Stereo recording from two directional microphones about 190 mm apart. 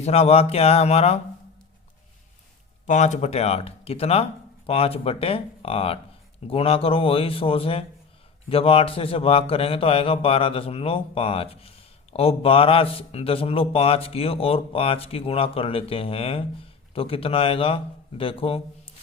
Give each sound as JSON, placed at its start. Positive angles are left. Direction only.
{"t": 0.0, "sound": "speech", "side_deg": 35}
{"t": 2.8, "sound": "a man's voice", "side_deg": 40}